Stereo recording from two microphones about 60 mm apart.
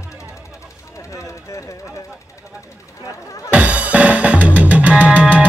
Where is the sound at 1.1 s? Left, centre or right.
Left.